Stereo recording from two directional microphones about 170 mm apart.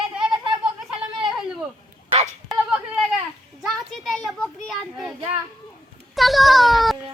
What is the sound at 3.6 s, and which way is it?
Children playing, centre (ahead or behind).